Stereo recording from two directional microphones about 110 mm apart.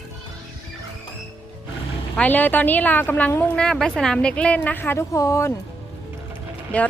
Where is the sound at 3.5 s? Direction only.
5° left (ahead or behind); by 5.5 s 25° left (ahead or behind).